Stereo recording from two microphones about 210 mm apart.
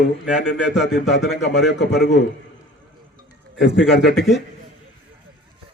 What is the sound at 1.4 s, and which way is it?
Speech, 55° left (ahead or behind).